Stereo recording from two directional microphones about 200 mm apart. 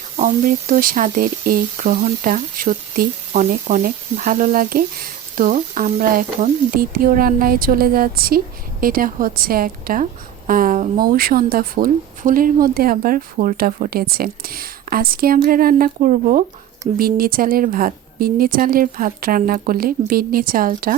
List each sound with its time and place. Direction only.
0.2 s speech: 40° right (ahead or behind)